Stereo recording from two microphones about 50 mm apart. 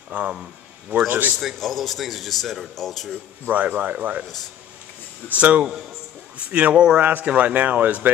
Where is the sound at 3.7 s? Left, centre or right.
Right.